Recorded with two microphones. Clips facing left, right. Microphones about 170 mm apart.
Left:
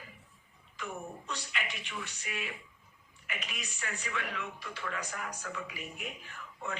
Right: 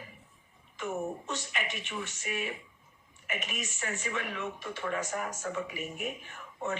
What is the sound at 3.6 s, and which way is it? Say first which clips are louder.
Speech: right 5 dB; 20° right (ahead or behind).